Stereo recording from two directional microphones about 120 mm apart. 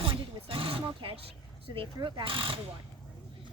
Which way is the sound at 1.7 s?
45° right (ahead or behind).